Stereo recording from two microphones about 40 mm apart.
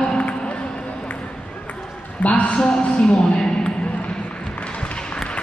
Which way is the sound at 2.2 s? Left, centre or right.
Left.